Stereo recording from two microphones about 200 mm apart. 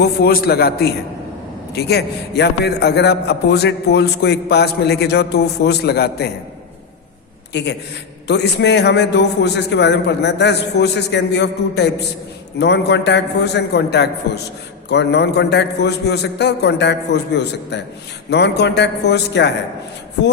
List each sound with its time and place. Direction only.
0.0 s a man's voice: 50° left (ahead or behind)
7.5 s a man's voice: 60° left (ahead or behind)